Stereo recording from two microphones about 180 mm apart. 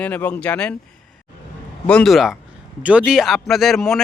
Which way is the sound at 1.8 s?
5° left (ahead or behind).